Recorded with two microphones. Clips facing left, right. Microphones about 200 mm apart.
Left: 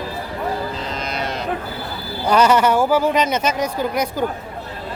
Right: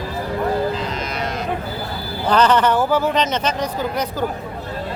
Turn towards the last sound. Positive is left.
turn(degrees=10)  # may be behind; listen again after turning